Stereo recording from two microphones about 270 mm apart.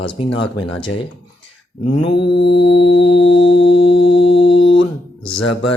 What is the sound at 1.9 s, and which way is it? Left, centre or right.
Mantra, centre.